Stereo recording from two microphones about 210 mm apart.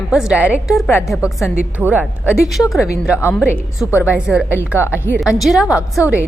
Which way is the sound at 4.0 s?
5° right (ahead or behind).